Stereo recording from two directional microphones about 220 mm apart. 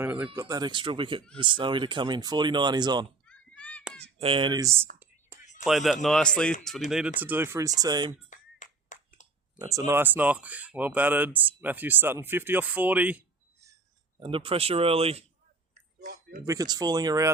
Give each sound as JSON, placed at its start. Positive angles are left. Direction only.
{"t": 0.0, "sound": "speech", "side_deg": -5}
{"t": 0.3, "sound": "speech", "side_deg": -15}
{"t": 3.2, "sound": "a sound", "side_deg": 5}
{"t": 4.0, "sound": "speech", "side_deg": -25}
{"t": 5.6, "sound": "speech", "side_deg": 0}
{"t": 8.3, "sound": "a sound", "side_deg": 35}
{"t": 9.6, "sound": "speech", "side_deg": -15}
{"t": 14.2, "sound": "speech", "side_deg": -25}
{"t": 15.7, "sound": "chewing", "side_deg": -40}
{"t": 16.5, "sound": "speech", "side_deg": -15}